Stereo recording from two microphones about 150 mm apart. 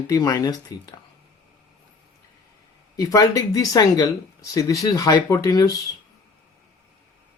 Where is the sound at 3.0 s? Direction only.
25° left (ahead or behind).